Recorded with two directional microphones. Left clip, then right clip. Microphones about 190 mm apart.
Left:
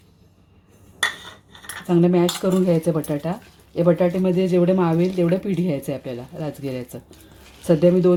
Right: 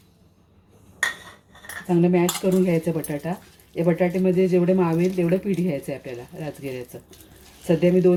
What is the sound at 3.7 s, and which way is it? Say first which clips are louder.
Speech: left 4 dB; 30° left (ahead or behind).